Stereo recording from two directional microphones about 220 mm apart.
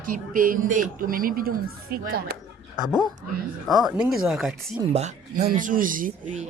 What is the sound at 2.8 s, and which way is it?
A man's voice, centre (ahead or behind).